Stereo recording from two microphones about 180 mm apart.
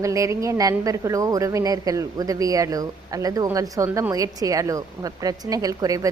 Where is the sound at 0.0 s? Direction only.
15° right (ahead or behind).